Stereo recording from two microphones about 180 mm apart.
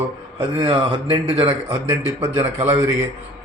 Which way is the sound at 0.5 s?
25° right (ahead or behind).